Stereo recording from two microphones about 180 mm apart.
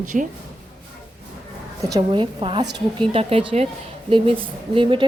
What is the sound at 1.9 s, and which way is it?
A woman's voice, 25° right (ahead or behind).